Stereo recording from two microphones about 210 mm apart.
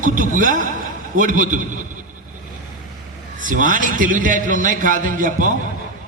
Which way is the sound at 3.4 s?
40° right (ahead or behind).